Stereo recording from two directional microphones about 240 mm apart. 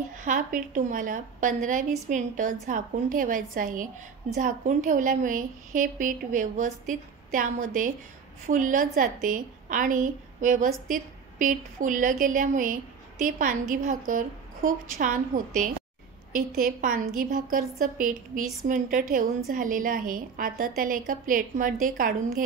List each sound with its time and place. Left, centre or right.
0.2 s a woman's voice: right